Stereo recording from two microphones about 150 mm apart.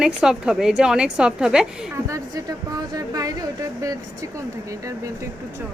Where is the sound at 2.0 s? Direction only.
25° right (ahead or behind).